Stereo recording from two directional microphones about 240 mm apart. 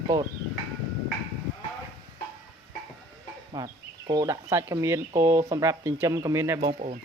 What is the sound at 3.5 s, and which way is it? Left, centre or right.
Speech, centre.